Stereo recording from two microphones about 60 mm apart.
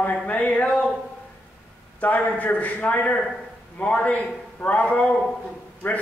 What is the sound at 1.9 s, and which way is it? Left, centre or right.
Speech, left.